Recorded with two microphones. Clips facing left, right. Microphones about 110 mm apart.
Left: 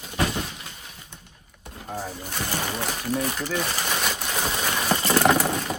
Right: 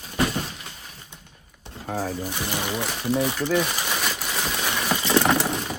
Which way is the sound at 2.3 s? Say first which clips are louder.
Right 1 dB; 15° right (ahead or behind).